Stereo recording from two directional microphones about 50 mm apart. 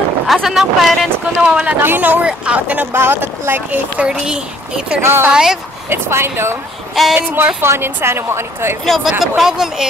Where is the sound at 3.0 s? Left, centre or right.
Right.